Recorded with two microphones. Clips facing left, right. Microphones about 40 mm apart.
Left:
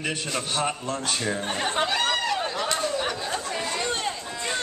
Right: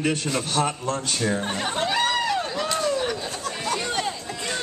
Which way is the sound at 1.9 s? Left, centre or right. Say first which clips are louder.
Right 2 dB; centre.